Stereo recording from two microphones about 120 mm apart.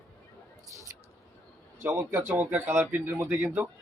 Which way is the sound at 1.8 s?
20° right (ahead or behind).